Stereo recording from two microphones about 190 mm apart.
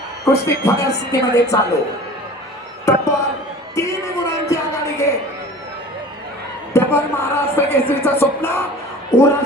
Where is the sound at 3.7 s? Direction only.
15° left (ahead or behind).